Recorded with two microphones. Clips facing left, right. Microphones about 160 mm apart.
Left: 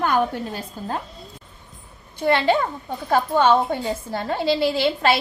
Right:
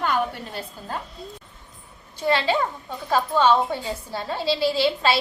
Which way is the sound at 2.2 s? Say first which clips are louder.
Left 3 dB; 55° left (ahead or behind).